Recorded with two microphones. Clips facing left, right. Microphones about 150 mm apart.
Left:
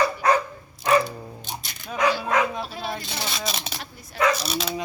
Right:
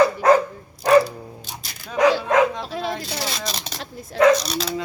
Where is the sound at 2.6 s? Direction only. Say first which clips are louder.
Right 5 dB; 90° right.